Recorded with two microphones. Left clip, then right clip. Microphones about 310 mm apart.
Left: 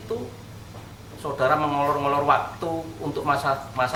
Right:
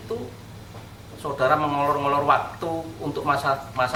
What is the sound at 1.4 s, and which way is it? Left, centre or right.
Speech, centre.